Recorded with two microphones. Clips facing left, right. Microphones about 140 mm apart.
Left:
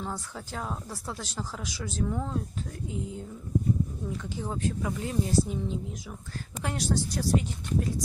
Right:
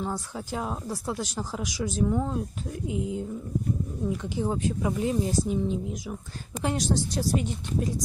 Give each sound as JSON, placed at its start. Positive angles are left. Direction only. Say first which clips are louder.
{"t": 0.0, "sound": "speech", "louder": "right 4 dB", "side_deg": -15}
{"t": 4.2, "sound": "speech", "louder": "right 2 dB", "side_deg": -20}